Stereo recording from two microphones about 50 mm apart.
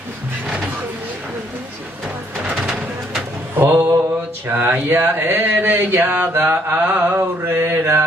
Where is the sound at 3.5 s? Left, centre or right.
Right.